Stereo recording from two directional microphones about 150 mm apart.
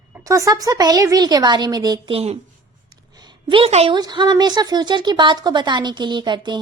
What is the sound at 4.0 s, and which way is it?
Speech, 25° right (ahead or behind).